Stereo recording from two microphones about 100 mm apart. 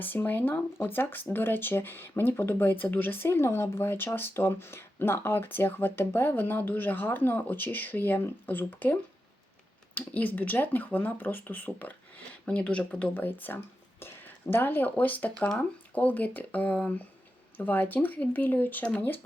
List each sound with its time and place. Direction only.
0.0 s speech: 20° left (ahead or behind)